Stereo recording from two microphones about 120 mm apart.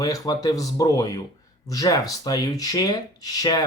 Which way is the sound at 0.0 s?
30° left (ahead or behind).